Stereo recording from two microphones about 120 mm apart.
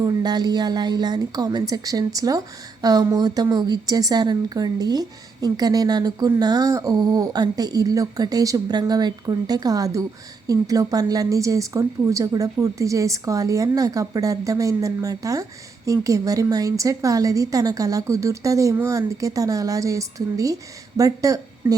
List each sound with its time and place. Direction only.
0.0 s a woman's voice: 35° right (ahead or behind)